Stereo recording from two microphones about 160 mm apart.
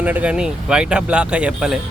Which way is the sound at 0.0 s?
10° right (ahead or behind).